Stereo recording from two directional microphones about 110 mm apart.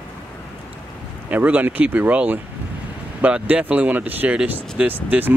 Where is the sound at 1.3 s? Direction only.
15° right (ahead or behind).